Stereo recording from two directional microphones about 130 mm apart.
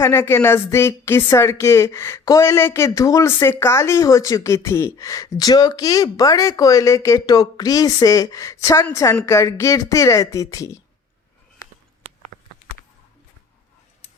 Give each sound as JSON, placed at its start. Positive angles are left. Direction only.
{"t": 0.0, "sound": "a woman's voice", "side_deg": 20}